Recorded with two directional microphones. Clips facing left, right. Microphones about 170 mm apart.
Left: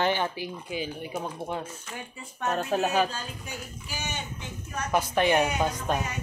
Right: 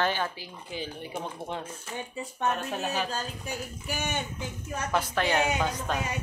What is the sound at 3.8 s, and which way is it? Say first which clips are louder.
Speech: right 4 dB; 55° right (ahead or behind).